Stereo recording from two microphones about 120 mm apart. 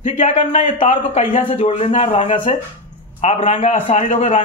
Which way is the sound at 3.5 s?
50° left (ahead or behind).